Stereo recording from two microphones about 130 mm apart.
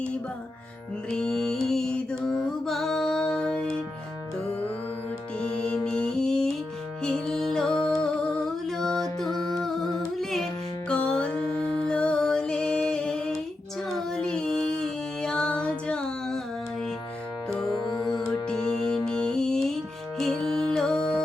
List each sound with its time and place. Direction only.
1.1 s music: 5° left (ahead or behind)
5.4 s music: 10° left (ahead or behind)
10.8 s music: 10° left (ahead or behind)
17.6 s music: 35° left (ahead or behind)
18.4 s music: 5° left (ahead or behind)